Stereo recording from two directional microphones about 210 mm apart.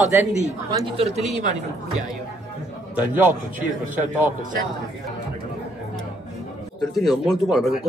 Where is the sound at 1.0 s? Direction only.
30° right (ahead or behind).